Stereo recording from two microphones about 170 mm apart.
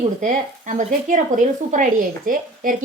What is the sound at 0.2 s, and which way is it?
Speech, 50° right (ahead or behind).